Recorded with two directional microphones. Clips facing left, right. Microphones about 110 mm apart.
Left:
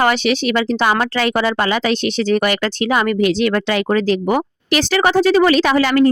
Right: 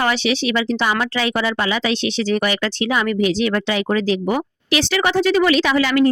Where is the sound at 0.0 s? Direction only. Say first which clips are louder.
Left 3 dB; 50° left (ahead or behind).